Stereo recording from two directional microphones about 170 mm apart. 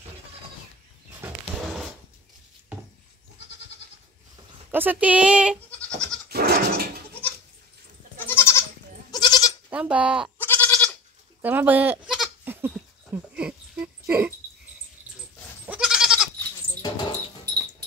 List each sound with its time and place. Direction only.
1.2 s wild animals: 5° right (ahead or behind)
4.6 s speech: 10° right (ahead or behind)
6.2 s goat: 65° right (ahead or behind)
8.3 s goat: 15° left (ahead or behind)
9.7 s speech: 5° right (ahead or behind)
10.4 s goat: 10° left (ahead or behind)
11.4 s speech: 10° right (ahead or behind)
12.4 s dog: 15° right (ahead or behind)
15.6 s goat: 5° right (ahead or behind)
16.8 s mouse: 25° left (ahead or behind)